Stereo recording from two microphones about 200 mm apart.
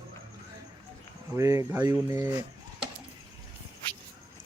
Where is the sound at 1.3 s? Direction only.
15° right (ahead or behind).